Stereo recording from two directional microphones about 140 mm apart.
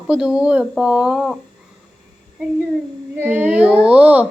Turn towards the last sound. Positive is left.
turn(degrees=-10)  # may be behind; listen again after turning